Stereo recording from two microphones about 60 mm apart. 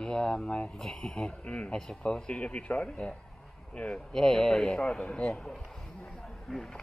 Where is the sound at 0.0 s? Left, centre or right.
Centre.